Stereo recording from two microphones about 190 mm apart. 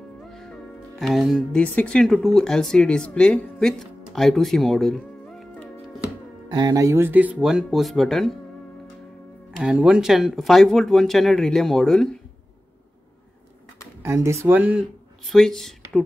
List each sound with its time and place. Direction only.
0.3 s speech: centre (ahead or behind)
6.5 s speech: 20° right (ahead or behind); by 8.4 s centre (ahead or behind)
9.6 s speech: 5° right (ahead or behind)
14.0 s speech: 15° right (ahead or behind); by 15.7 s centre (ahead or behind)